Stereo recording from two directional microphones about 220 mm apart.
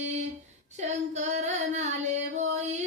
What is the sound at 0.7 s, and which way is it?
Female singing, 30° right (ahead or behind).